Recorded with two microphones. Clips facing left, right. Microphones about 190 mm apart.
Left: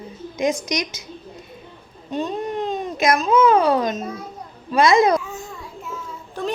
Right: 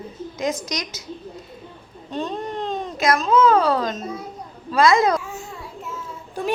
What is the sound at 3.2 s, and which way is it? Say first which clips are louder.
A woman's voice: left 1 dB; 15° left (ahead or behind).